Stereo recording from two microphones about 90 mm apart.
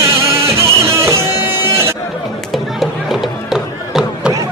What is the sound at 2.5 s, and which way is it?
Music, centre (ahead or behind).